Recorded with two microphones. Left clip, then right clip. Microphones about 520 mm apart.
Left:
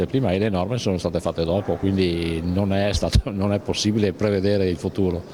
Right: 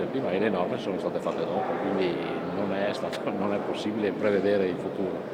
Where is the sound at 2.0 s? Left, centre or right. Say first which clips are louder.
Left 4 dB; left.